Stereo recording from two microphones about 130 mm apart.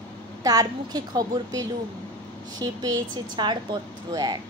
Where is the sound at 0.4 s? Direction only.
30° right (ahead or behind).